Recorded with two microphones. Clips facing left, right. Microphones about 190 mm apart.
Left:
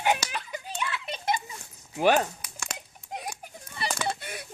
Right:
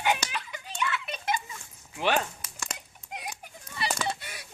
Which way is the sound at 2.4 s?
5° left (ahead or behind).